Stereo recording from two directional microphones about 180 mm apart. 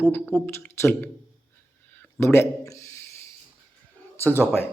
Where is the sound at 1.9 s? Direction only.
15° left (ahead or behind).